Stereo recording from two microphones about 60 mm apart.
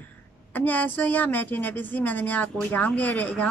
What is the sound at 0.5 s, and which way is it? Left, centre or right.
A woman's voice, left.